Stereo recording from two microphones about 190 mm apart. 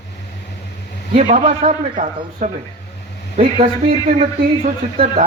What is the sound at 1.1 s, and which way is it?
A man's voice, 40° right (ahead or behind).